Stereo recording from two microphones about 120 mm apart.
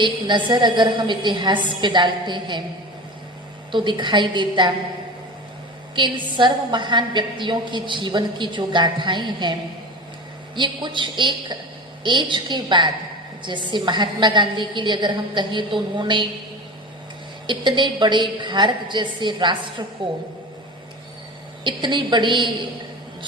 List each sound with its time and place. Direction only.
0.0 s a woman's voice: 40° right (ahead or behind)
3.7 s a woman's voice: 40° right (ahead or behind)
6.0 s a woman's voice: 40° right (ahead or behind)
17.4 s a woman's voice: 40° right (ahead or behind)
21.6 s a woman's voice: 40° right (ahead or behind)